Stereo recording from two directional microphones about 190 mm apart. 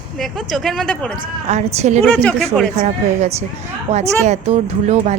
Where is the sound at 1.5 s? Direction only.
35° right (ahead or behind).